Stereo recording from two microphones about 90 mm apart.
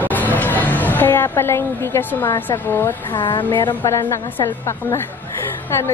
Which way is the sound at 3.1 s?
60° left (ahead or behind).